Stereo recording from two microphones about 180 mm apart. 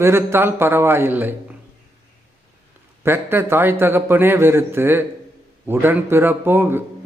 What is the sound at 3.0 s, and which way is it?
A man's voice, 10° right (ahead or behind).